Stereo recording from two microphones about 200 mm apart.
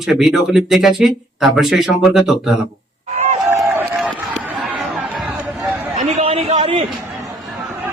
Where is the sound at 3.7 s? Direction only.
10° right (ahead or behind).